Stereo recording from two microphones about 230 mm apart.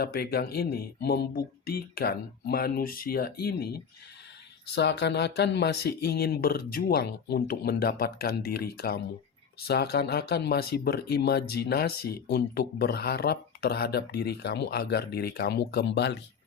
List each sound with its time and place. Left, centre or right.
0.0 s speech: left